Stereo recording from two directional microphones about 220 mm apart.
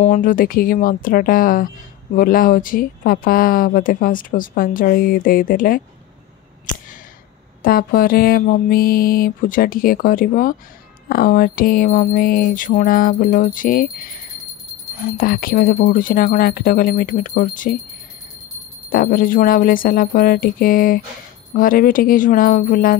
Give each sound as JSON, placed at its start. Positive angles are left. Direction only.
{"t": 0.0, "sound": "speech", "side_deg": 35}
{"t": 7.6, "sound": "speech", "side_deg": 40}
{"t": 18.9, "sound": "speech", "side_deg": 40}